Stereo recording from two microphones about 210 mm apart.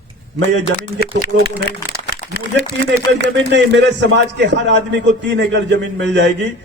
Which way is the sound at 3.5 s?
55° right (ahead or behind).